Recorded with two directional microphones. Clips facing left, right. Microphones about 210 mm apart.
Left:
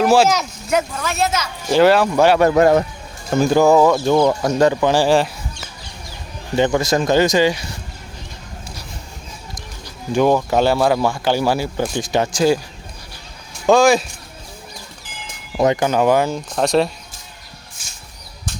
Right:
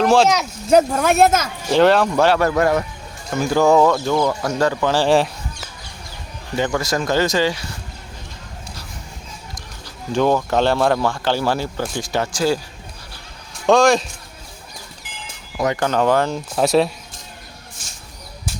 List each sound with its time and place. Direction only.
0.0 s speech: 5° left (ahead or behind)
0.7 s a woman's voice: 40° right (ahead or behind)
1.7 s speech: 5° left (ahead or behind)
2.5 s speech: 25° left (ahead or behind)
3.5 s speech: 5° left (ahead or behind)
5.0 s speech: centre (ahead or behind)
6.6 s speech: 20° left (ahead or behind)
9.6 s speech: 15° left (ahead or behind)
13.7 s speech: 5° left (ahead or behind)
15.5 s speech: 25° left (ahead or behind)
15.8 s speech: 10° left (ahead or behind)
16.5 s speech: 5° right (ahead or behind)